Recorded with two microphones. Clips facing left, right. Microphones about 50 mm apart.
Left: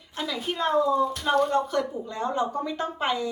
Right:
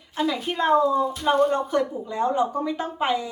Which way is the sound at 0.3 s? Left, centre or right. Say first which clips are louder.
Right 5 dB; right.